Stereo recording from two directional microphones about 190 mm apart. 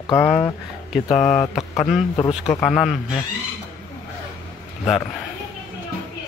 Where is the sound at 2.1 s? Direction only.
25° left (ahead or behind).